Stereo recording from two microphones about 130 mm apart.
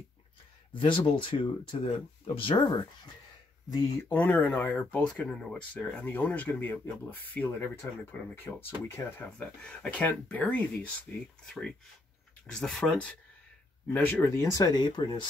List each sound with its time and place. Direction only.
0.7 s speech: 40° left (ahead or behind)
4.1 s speech: 15° left (ahead or behind)
9.4 s speech: 10° left (ahead or behind); by 15.2 s 35° left (ahead or behind)